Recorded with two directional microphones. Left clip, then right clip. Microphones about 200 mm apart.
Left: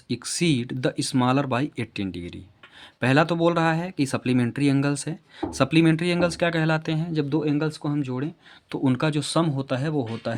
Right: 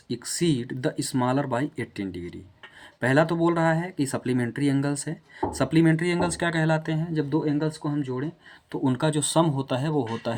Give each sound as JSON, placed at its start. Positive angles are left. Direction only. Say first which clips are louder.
{"t": 0.1, "sound": "speech", "louder": "left 2 dB", "side_deg": 50}
{"t": 9.0, "sound": "speech", "louder": "right 4 dB", "side_deg": 35}